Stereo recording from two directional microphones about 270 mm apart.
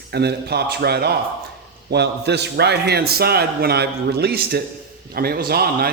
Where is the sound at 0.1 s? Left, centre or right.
Right.